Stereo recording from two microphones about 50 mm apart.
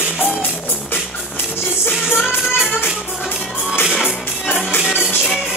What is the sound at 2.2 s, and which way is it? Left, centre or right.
Music, centre.